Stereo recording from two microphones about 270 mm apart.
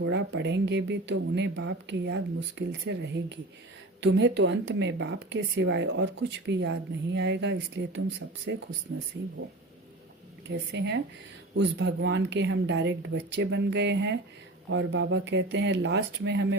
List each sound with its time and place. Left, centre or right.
0.0 s speech: right
10.5 s speech: right